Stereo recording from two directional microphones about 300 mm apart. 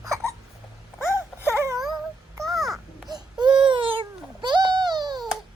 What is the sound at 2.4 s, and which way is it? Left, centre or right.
Babbling, centre.